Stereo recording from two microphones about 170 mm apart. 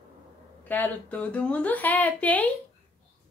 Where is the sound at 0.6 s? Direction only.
10° left (ahead or behind).